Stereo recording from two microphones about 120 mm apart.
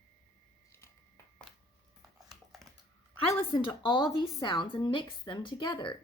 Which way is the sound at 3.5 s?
40° left (ahead or behind).